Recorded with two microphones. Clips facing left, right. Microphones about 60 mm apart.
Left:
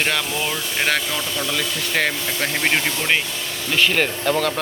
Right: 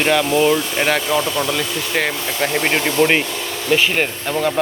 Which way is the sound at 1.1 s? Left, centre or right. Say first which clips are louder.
Right 7 dB; right.